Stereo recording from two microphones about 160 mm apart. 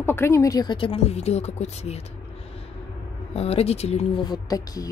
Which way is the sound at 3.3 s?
40° left (ahead or behind).